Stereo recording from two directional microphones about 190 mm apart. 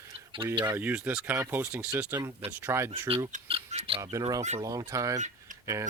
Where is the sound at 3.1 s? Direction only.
30° right (ahead or behind).